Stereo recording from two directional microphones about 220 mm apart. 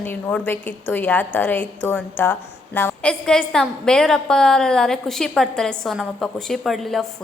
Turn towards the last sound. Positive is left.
turn(degrees=0)  # may be behind; listen again after turning